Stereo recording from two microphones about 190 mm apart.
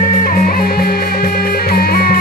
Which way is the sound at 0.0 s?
50° left (ahead or behind).